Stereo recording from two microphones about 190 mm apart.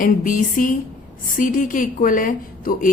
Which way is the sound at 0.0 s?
45° left (ahead or behind).